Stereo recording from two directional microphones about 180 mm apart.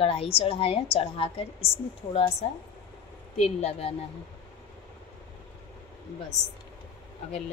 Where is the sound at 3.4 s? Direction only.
35° left (ahead or behind).